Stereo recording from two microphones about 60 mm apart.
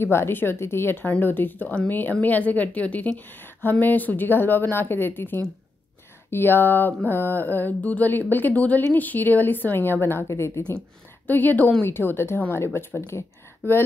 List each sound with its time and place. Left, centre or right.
0.0 s speech: left
1.2 s a woman's voice: left
10.2 s speech: left
11.2 s speech: left